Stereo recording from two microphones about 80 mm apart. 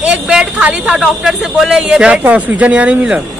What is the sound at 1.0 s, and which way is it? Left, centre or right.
Speech, centre.